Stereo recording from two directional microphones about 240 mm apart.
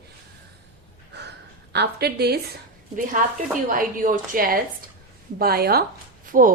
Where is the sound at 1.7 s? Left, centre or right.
Right.